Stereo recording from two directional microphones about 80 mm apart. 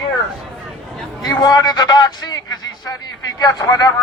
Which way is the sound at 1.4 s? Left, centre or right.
Left.